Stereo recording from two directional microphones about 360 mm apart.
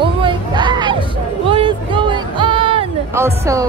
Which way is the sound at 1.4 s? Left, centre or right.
Centre.